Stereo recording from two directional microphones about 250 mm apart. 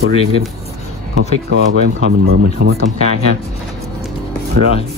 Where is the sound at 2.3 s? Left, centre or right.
Right.